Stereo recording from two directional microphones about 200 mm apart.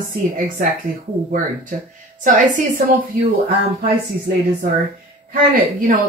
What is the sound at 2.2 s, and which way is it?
Speech, 40° right (ahead or behind).